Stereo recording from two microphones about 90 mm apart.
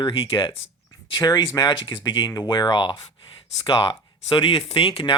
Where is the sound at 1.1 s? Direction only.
50° left (ahead or behind).